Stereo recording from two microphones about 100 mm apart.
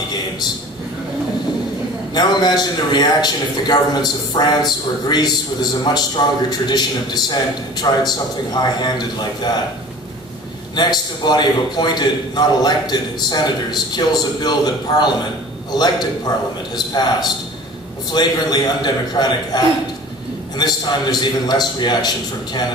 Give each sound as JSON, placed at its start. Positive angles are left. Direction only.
{"t": 2.1, "sound": "a man's voice", "side_deg": 45}
{"t": 10.8, "sound": "a man's voice", "side_deg": 45}